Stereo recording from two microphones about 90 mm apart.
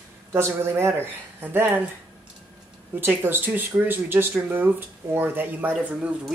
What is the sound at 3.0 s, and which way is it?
Speech, 25° right (ahead or behind).